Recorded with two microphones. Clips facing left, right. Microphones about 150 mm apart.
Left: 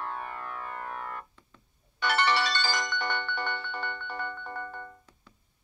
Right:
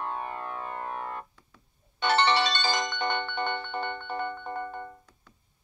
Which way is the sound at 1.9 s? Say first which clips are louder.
Right 3 dB; 25° right (ahead or behind).